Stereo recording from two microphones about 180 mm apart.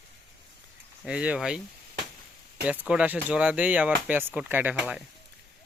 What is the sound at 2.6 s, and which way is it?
Speech, 5° right (ahead or behind).